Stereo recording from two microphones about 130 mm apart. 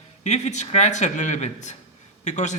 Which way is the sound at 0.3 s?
65° left (ahead or behind).